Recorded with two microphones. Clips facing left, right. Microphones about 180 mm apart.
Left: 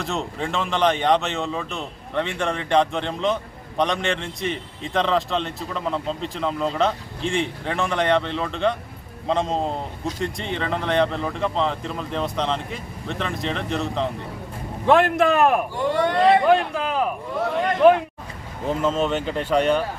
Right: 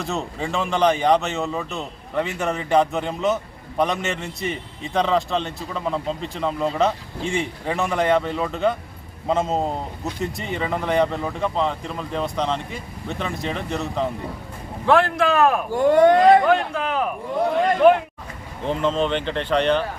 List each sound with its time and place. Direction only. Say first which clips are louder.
0.0 s speech: even; centre (ahead or behind)
14.8 s speech: left 1 dB; 20° left (ahead or behind)
15.7 s speech: right 7 dB; 45° right (ahead or behind)
16.5 s speech: left 1 dB; 5° left (ahead or behind)
18.6 s speech: even; 5° left (ahead or behind)